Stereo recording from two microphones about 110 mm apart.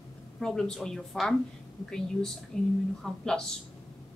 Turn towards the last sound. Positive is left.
turn(degrees=5)  # may be behind; listen again after turning